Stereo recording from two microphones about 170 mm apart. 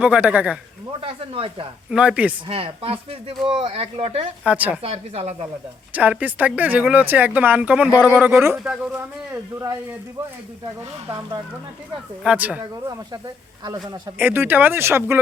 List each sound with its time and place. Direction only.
0.0 s speech: 5° right (ahead or behind)
1.0 s speech: 30° right (ahead or behind)
1.9 s speech: 5° right (ahead or behind)
2.5 s speech: 35° right (ahead or behind)
4.4 s speech: 10° right (ahead or behind)
4.8 s speech: 35° right (ahead or behind)
5.9 s speech: 10° right (ahead or behind)
12.2 s speech: 5° right (ahead or behind)
12.9 s speech: 20° right (ahead or behind)